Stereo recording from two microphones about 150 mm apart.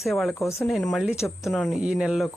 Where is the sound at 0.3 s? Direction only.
20° left (ahead or behind).